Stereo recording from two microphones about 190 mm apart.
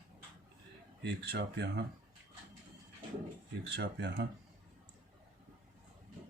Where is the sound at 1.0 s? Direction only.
60° right (ahead or behind).